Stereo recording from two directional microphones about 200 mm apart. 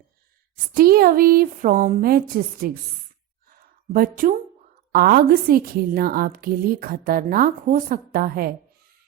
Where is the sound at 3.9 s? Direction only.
45° right (ahead or behind).